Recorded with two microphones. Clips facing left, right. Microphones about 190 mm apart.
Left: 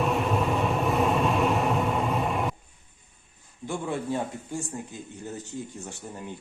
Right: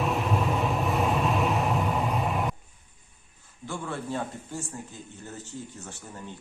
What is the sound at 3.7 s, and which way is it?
Speech, 15° left (ahead or behind).